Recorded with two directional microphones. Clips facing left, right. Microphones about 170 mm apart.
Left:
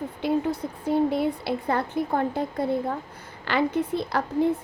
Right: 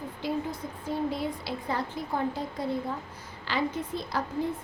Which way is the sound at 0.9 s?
60° left (ahead or behind).